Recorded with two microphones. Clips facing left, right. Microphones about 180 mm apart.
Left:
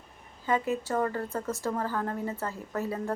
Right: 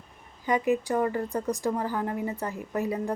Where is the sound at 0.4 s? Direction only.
15° right (ahead or behind).